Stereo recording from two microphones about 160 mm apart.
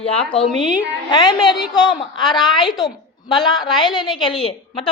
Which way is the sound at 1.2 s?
30° left (ahead or behind).